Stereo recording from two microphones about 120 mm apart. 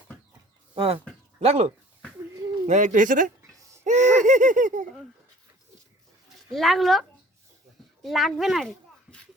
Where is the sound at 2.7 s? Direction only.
90° right.